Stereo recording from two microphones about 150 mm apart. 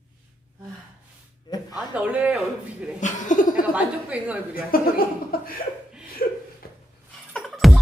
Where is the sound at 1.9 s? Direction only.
10° right (ahead or behind).